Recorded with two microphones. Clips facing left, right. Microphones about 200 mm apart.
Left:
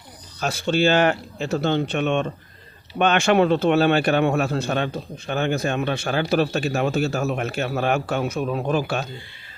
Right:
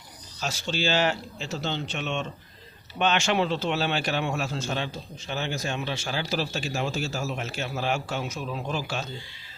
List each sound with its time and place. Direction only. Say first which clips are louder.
0.3 s a man's voice: left 9 dB; 55° left (ahead or behind)